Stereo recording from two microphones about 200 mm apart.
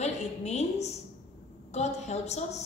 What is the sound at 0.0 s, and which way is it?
A woman's voice, 35° left (ahead or behind).